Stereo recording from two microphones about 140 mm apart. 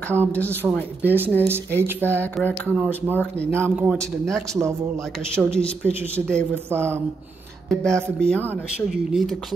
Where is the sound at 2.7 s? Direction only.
10° right (ahead or behind).